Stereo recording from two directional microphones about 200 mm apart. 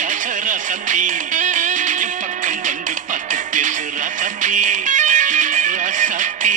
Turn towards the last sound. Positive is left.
turn(degrees=-40)  # may be behind; listen again after turning